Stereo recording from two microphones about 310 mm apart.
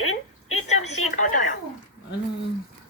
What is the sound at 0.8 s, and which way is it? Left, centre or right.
Speech, left.